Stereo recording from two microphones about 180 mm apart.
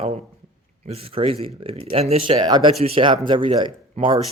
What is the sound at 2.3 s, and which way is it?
Speech, 20° right (ahead or behind).